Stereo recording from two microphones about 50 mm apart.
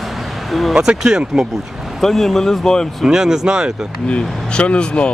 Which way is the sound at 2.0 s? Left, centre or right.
Centre.